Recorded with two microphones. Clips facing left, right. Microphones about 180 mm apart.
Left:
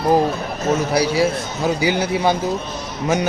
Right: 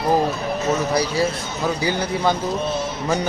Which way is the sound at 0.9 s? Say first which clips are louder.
Left 3 dB; 10° left (ahead or behind).